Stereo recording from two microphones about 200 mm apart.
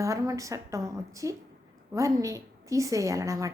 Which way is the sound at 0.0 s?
15° right (ahead or behind).